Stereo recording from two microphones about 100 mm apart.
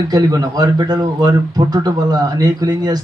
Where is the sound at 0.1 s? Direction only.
40° right (ahead or behind).